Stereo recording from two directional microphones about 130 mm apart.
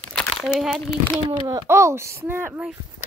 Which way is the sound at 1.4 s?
25° right (ahead or behind).